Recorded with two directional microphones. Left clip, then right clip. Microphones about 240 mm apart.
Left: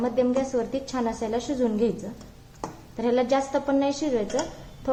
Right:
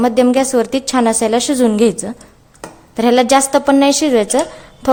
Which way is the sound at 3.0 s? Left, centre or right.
Right.